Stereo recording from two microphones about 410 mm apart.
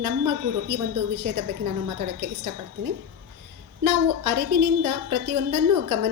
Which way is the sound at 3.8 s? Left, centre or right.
Right.